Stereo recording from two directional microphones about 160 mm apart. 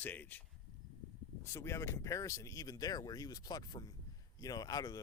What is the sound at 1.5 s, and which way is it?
Speech, 15° left (ahead or behind).